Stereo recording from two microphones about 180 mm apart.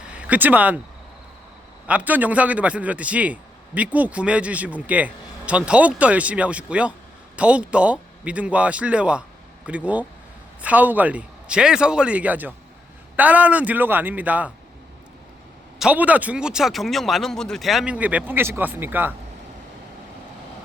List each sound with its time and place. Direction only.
0.1 s speech: 10° right (ahead or behind)
1.9 s a man's voice: 10° right (ahead or behind)
15.8 s a man's voice: 5° right (ahead or behind)